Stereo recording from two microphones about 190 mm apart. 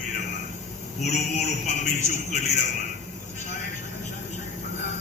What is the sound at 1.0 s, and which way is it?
A man's voice, 40° left (ahead or behind).